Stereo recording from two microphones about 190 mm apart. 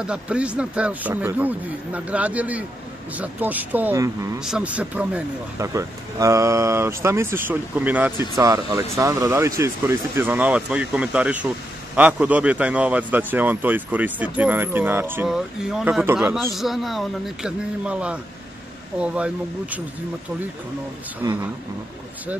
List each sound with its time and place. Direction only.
0.0 s a man's voice: 5° right (ahead or behind)
4.4 s a man's voice: 5° right (ahead or behind)
8.4 s a man's voice: 20° right (ahead or behind)
21.2 s speech: 20° right (ahead or behind)